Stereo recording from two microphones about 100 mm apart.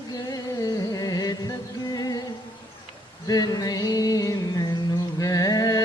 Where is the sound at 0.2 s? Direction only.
40° left (ahead or behind).